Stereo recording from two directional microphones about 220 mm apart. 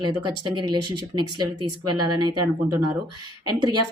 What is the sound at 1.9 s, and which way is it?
Speech, 20° right (ahead or behind).